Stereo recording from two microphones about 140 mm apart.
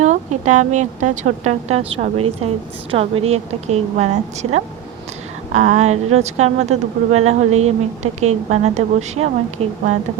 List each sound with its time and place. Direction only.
0.0 s speech: 60° right (ahead or behind)